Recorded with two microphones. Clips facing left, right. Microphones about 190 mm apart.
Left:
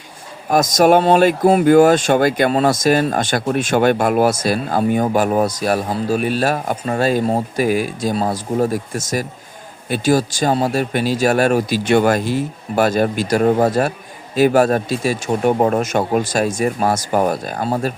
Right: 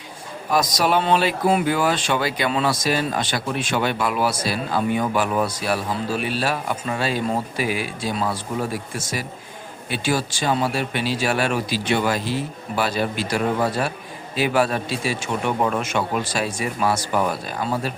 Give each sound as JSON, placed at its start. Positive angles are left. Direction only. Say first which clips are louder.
{"t": 0.5, "sound": "speech", "louder": "left 7 dB", "side_deg": 45}